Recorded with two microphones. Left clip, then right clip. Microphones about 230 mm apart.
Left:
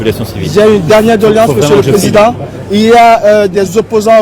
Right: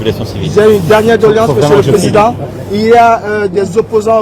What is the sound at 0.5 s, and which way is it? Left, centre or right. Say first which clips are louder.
Speech: left 1 dB; left.